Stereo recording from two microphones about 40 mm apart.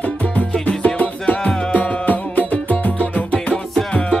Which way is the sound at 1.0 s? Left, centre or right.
Left.